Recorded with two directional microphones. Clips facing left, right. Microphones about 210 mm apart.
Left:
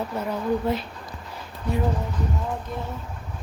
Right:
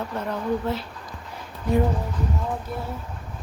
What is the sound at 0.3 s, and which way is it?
Speech, 15° left (ahead or behind).